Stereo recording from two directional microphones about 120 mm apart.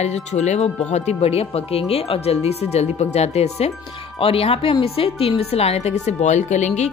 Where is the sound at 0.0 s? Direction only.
70° left (ahead or behind).